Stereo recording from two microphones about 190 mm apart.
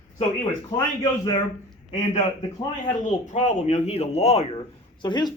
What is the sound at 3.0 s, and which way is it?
Speech, 40° left (ahead or behind).